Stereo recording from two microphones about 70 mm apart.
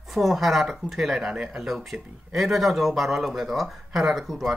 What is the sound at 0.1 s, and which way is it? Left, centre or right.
Speech, centre.